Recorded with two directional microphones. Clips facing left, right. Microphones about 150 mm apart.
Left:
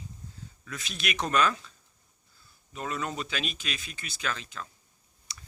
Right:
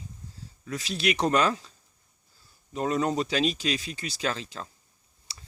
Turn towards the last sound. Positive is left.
turn(degrees=-30)  # may be behind; listen again after turning